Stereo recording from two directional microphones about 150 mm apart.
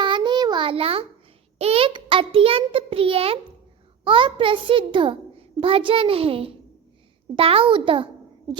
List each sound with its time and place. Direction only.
0.0 s child singing: 30° right (ahead or behind)
1.5 s a child's voice: 40° right (ahead or behind)